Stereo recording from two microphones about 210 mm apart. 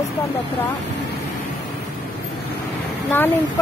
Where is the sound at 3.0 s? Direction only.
10° left (ahead or behind).